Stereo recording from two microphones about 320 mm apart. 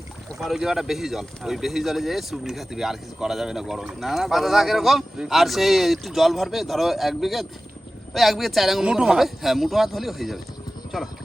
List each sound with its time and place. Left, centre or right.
0.3 s speech: centre